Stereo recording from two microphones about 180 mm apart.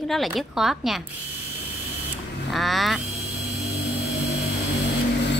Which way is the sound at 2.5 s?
Centre (ahead or behind).